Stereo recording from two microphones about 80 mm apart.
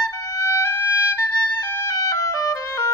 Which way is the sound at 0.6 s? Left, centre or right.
Left.